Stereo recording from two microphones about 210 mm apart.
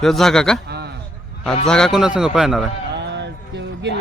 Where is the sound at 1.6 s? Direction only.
5° left (ahead or behind).